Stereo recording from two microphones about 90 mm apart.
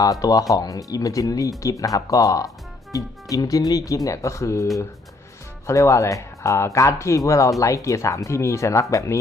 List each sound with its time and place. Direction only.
0.0 s speech: 40° left (ahead or behind)